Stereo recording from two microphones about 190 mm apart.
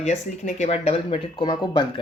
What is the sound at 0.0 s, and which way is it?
Speech, 40° left (ahead or behind).